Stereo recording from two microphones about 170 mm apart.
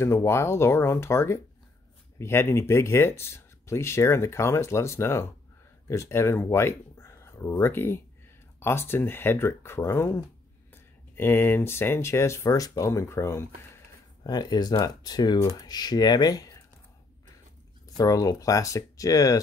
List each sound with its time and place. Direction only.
0.0 s speech: 15° left (ahead or behind)
17.8 s speech: 20° left (ahead or behind)